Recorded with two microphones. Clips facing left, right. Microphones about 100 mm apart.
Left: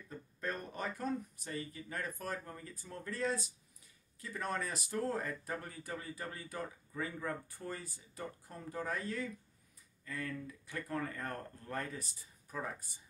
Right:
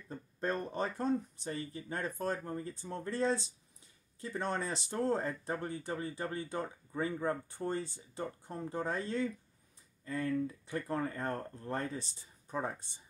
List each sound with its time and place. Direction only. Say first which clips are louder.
0.1 s speech: right 5 dB; 30° right (ahead or behind)